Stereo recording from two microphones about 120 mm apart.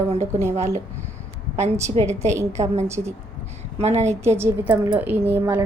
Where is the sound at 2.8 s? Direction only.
20° right (ahead or behind).